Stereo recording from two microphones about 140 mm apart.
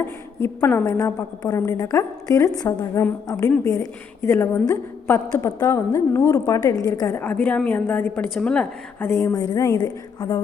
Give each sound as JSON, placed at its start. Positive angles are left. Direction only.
{"t": 0.0, "sound": "a woman's voice", "side_deg": 15}
{"t": 9.3, "sound": "a woman's voice", "side_deg": 25}